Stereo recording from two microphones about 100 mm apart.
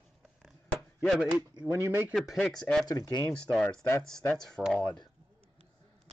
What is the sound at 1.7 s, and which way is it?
Speech, 25° right (ahead or behind).